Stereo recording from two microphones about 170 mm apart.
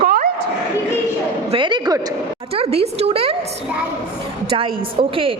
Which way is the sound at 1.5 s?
30° right (ahead or behind).